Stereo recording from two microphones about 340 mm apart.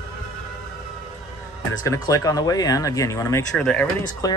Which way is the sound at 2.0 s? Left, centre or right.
Centre.